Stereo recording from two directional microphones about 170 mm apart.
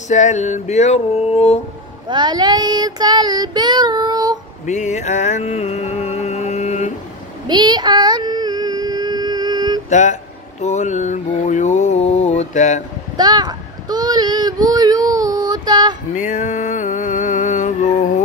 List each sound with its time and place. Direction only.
0.1 s a sound: 45° left (ahead or behind)
2.0 s child singing: 25° right (ahead or behind)
4.6 s music: 45° left (ahead or behind)
7.4 s child singing: 25° right (ahead or behind)
9.8 s speech: 45° left (ahead or behind)
10.6 s mantra: 45° left (ahead or behind)
13.2 s child singing: 25° right (ahead or behind)
16.2 s music: 45° left (ahead or behind)